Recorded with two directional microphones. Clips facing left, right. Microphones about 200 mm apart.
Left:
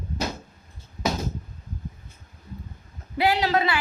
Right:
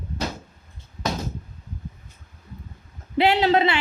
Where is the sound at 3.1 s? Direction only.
25° right (ahead or behind).